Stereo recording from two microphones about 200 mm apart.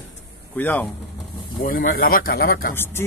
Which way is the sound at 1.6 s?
45° left (ahead or behind).